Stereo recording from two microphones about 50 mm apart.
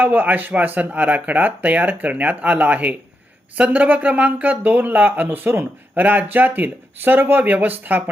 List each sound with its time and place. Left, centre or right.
0.0 s speech: right